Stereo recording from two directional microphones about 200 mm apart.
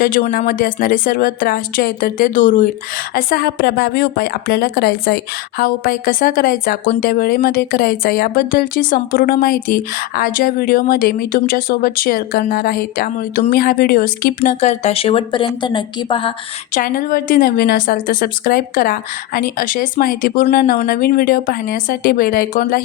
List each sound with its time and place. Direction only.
0.2 s a woman's voice: 40° left (ahead or behind)
14.6 s a woman's voice: 35° left (ahead or behind)
16.7 s a woman's voice: 45° left (ahead or behind)